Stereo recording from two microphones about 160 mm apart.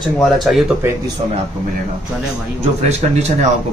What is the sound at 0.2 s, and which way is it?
Speech, centre (ahead or behind).